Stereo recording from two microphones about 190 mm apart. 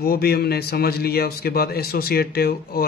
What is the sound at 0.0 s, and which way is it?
Speech, 55° left (ahead or behind).